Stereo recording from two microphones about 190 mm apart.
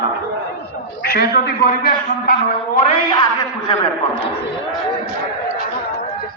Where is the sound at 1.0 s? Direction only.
55° left (ahead or behind).